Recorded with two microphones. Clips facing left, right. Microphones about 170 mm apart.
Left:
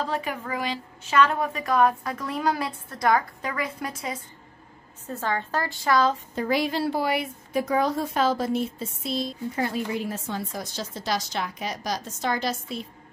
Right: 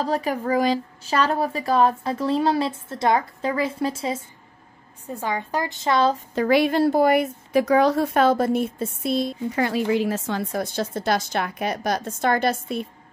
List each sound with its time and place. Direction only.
0.0 s a woman's voice: 40° right (ahead or behind)
5.0 s a woman's voice: 15° right (ahead or behind)
6.3 s a woman's voice: 70° right (ahead or behind)
6.8 s speech: 50° right (ahead or behind)
7.5 s speech: 80° right; by 12.8 s 55° right (ahead or behind)